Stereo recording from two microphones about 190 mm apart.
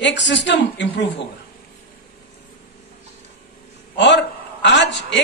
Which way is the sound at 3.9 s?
70° left (ahead or behind).